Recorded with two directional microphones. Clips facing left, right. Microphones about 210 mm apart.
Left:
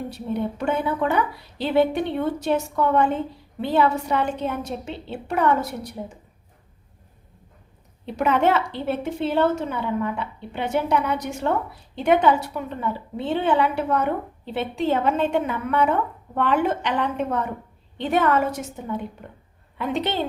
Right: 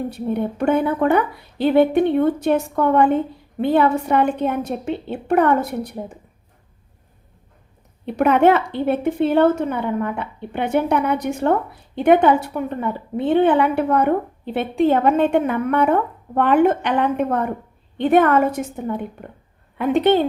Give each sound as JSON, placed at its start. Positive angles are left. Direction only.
{"t": 0.1, "sound": "a woman's voice", "side_deg": -55}
{"t": 8.0, "sound": "a woman's voice", "side_deg": -60}